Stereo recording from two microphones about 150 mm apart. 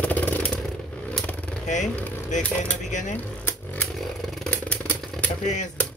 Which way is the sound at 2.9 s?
55° left (ahead or behind).